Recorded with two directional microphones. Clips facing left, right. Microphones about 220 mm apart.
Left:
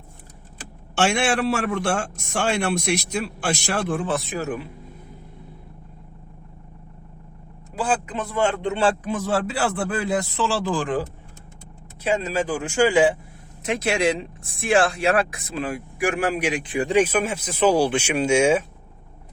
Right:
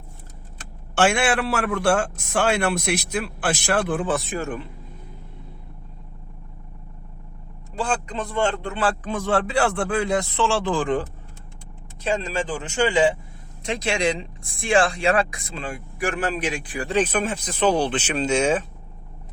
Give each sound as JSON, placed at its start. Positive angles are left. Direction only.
{"t": 0.9, "sound": "a man's voice", "side_deg": 0}
{"t": 7.8, "sound": "speech", "side_deg": 5}
{"t": 8.6, "sound": "a man's voice", "side_deg": 25}
{"t": 9.0, "sound": "a man's voice", "side_deg": 5}
{"t": 12.0, "sound": "speech", "side_deg": 5}